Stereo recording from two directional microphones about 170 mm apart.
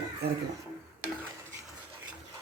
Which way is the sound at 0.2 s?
70° right (ahead or behind).